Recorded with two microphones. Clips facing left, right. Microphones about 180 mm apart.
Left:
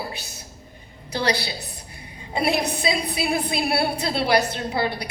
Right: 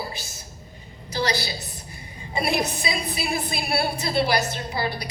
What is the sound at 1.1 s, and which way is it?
A woman's voice, 60° left (ahead or behind).